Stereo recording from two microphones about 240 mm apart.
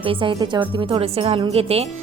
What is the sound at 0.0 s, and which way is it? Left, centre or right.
A woman's voice, right.